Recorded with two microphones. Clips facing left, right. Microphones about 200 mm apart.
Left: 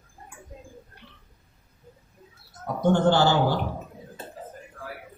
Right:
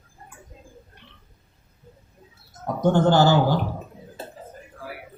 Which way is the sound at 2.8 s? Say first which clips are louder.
Right 2 dB; 40° right (ahead or behind).